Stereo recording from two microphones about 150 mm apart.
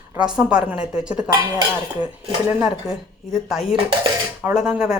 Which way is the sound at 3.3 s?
Centre (ahead or behind).